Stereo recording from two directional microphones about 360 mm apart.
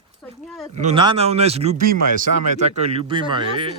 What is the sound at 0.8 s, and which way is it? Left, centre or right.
Speech, centre.